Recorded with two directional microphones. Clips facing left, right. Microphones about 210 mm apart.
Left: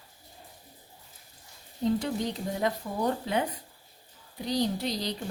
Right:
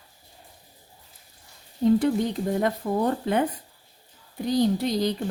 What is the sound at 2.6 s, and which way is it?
Speech, 55° right (ahead or behind).